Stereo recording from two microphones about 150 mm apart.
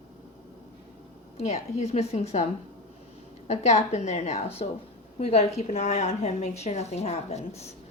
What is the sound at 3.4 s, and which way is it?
A woman's voice, 50° left (ahead or behind).